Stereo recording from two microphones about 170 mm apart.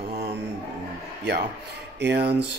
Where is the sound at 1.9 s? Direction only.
85° right.